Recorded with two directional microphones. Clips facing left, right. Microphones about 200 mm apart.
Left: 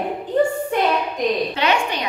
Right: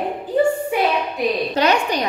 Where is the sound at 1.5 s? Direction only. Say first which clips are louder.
Right 3 dB; 40° right (ahead or behind).